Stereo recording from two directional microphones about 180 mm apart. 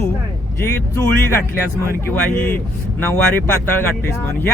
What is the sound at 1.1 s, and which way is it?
Speech, 15° left (ahead or behind).